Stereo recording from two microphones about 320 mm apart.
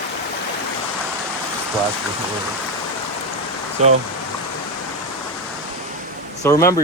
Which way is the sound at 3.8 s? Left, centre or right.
Right.